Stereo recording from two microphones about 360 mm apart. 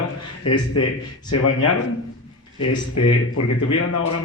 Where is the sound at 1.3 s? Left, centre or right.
Left.